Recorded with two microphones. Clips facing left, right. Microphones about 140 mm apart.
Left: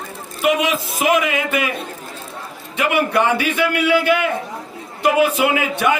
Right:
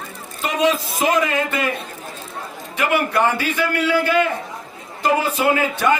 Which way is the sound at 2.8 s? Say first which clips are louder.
Left 1 dB; 20° left (ahead or behind).